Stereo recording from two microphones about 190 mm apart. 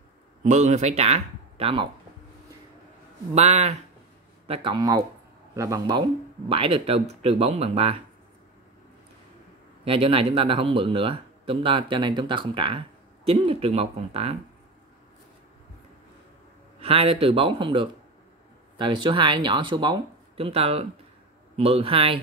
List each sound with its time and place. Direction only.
0.4 s speech: 40° right (ahead or behind)
3.3 s speech: 35° right (ahead or behind)
4.5 s speech: 25° right (ahead or behind)
9.8 s speech: 30° right (ahead or behind)
16.8 s speech: 30° right (ahead or behind)